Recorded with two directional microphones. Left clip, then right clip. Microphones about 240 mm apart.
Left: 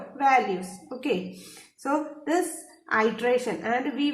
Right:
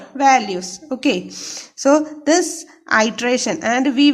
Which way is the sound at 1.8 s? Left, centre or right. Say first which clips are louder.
Right 13 dB; right.